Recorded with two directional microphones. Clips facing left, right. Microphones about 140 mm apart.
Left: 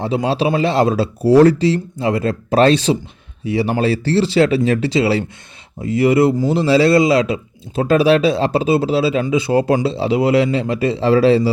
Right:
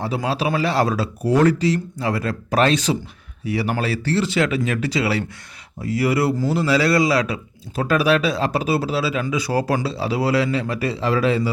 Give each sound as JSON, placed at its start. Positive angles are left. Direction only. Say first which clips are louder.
{"t": 0.0, "sound": "speech", "louder": "left 5 dB", "side_deg": 25}